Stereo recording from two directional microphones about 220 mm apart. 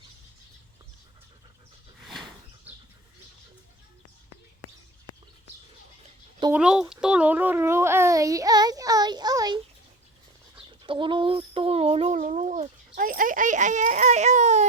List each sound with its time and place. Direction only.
6.5 s a child's voice: 5° right (ahead or behind)
10.7 s speech: 20° right (ahead or behind)